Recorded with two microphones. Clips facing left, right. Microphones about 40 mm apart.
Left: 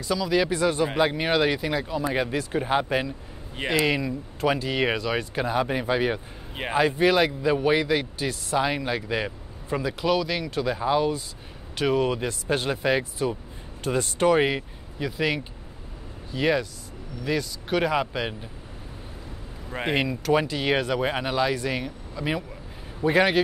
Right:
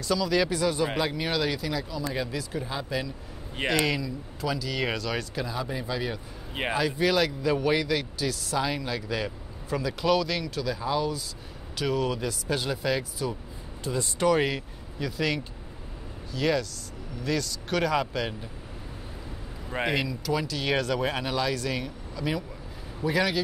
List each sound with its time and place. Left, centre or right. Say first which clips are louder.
0.0 s speech: left 1 dB; centre
0.5 s speech: left 3 dB; left
3.6 s speech: left 1 dB; centre
4.0 s speech: left 6 dB; left
5.4 s speech: left 7 dB; left
6.7 s speech: left 5 dB; left
10.0 s speech: even; centre
10.5 s speech: left 5 dB; left
13.8 s speech: left 4 dB; left
14.2 s speech: left 3 dB; left
19.9 s speech: left 7 dB; left
20.5 s speech: left 3 dB; left
23.0 s speech: left 6 dB; left